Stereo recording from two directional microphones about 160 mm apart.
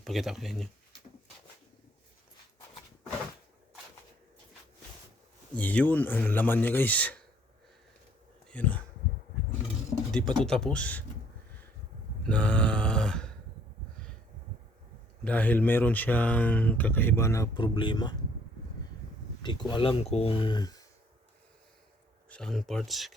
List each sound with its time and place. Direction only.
0.0 s speech: centre (ahead or behind)
5.5 s speech: 10° left (ahead or behind)
8.4 s speech: 10° left (ahead or behind)
10.3 s speech: 5° left (ahead or behind)
12.3 s a sound: 10° left (ahead or behind)
15.2 s speech: 10° left (ahead or behind); by 18.1 s 30° left (ahead or behind)
19.4 s speech: 30° left (ahead or behind)
22.3 s speech: 5° left (ahead or behind)